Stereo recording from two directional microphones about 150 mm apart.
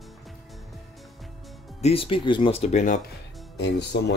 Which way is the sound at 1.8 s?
40° left (ahead or behind).